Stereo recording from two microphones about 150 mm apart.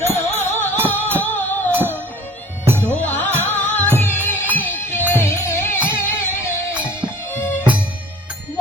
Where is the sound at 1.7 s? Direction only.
15° right (ahead or behind).